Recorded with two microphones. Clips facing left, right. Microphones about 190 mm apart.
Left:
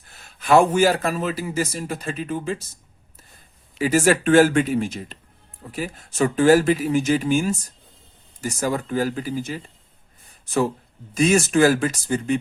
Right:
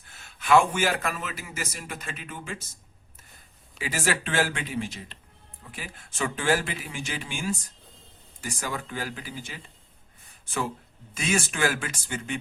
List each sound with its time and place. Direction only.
0.3 s a man's voice: 40° left (ahead or behind)
3.8 s a man's voice: 45° left (ahead or behind)